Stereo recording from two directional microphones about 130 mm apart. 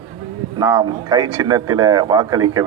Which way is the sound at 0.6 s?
25° right (ahead or behind).